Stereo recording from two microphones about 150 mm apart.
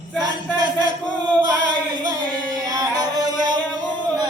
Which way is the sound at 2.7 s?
25° right (ahead or behind).